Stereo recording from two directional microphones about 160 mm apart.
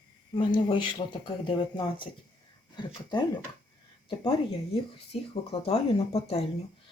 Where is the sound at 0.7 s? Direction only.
30° left (ahead or behind).